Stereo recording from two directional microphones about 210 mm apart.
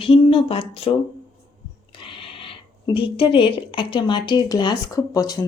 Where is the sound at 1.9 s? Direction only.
25° left (ahead or behind).